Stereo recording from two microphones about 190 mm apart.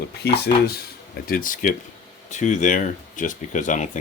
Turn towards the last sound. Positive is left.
turn(degrees=40)  # may be behind; listen again after turning